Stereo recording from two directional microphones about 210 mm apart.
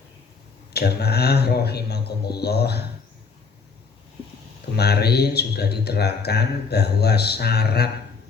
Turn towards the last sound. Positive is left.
turn(degrees=50)  # may be behind; listen again after turning